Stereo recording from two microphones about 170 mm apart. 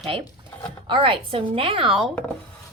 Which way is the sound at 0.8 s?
30° right (ahead or behind).